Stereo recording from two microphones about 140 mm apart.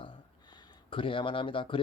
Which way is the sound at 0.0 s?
35° left (ahead or behind).